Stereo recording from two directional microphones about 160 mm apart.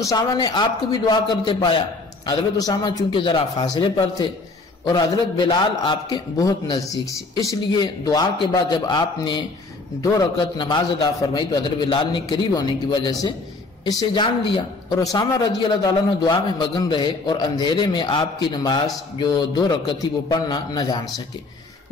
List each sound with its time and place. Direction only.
0.0 s speech: 20° left (ahead or behind)
5.5 s speech: 25° left (ahead or behind)
10.6 s speech: 30° left (ahead or behind)